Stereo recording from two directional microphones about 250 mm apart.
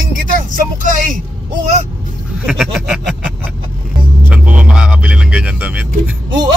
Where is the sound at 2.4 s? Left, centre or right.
Centre.